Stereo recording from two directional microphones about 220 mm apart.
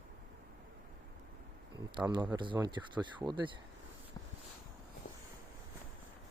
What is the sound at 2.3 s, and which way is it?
Speech, 20° right (ahead or behind).